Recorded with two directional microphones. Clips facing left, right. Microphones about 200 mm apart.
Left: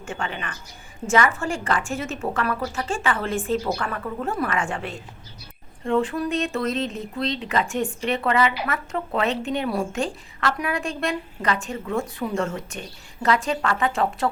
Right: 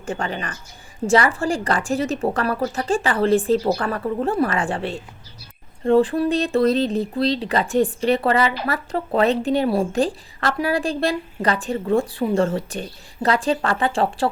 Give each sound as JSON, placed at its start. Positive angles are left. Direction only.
{"t": 0.0, "sound": "speech", "side_deg": -35}